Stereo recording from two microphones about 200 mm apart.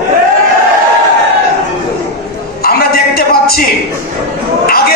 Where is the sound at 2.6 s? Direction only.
50° left (ahead or behind).